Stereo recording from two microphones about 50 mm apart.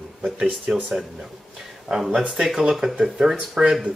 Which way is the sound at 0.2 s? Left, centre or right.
Centre.